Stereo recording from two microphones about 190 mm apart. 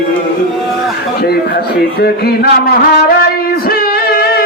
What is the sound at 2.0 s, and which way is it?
Music, 55° left (ahead or behind).